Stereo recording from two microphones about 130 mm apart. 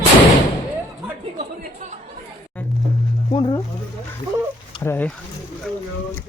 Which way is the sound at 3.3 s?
35° left (ahead or behind).